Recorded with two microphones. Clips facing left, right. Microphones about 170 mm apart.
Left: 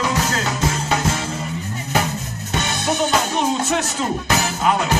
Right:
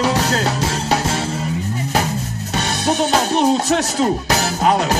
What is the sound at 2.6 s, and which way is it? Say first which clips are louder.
Music: right 3 dB; 35° right (ahead or behind).